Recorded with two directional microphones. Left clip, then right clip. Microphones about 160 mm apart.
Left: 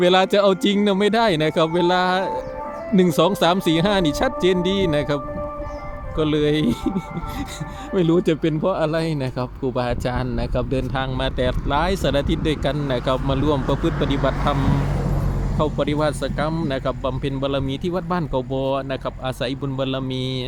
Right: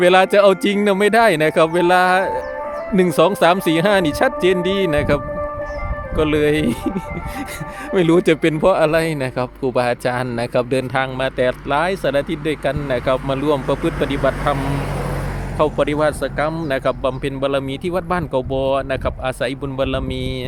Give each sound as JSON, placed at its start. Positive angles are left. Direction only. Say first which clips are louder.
{"t": 0.0, "sound": "speech", "louder": "right 4 dB", "side_deg": 0}
{"t": 7.9, "sound": "a man's voice", "louder": "right 5 dB", "side_deg": -15}
{"t": 14.5, "sound": "speech", "louder": "right 2 dB", "side_deg": -90}
{"t": 15.5, "sound": "speech", "louder": "right 5 dB", "side_deg": -5}